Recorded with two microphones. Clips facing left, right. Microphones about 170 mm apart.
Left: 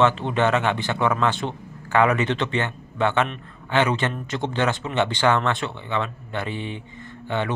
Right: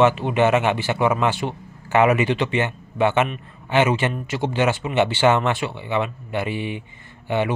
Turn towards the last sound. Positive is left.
turn(degrees=-15)  # may be behind; listen again after turning